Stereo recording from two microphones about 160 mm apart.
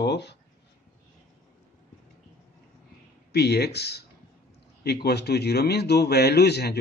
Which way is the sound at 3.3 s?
90° left.